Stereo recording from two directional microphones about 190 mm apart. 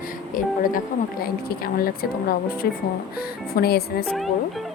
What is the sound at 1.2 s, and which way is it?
Speech, 50° left (ahead or behind).